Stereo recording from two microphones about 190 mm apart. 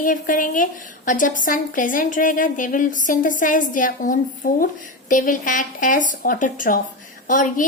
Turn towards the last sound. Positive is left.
turn(degrees=45)  # may be behind; listen again after turning